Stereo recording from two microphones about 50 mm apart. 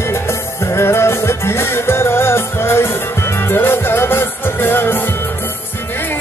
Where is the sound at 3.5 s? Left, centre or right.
Left.